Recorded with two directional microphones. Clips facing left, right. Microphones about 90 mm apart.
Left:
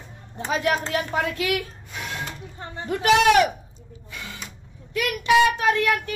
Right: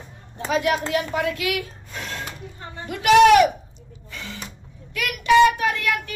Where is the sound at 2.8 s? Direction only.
35° left (ahead or behind).